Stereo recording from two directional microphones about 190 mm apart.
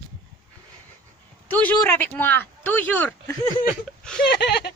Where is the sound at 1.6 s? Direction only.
10° left (ahead or behind).